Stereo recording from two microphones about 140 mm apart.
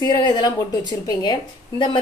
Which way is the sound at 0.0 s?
30° left (ahead or behind).